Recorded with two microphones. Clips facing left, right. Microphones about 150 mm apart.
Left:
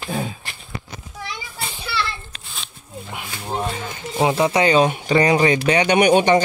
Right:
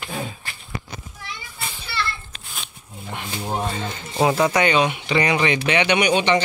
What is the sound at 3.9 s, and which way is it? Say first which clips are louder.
A man's voice: even; 15° left (ahead or behind).